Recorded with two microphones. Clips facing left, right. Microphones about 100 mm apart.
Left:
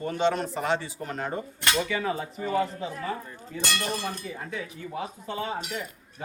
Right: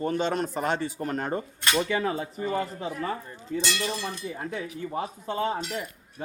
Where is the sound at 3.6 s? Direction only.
50° left (ahead or behind).